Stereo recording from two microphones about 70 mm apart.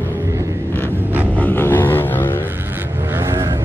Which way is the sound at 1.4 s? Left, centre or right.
Left.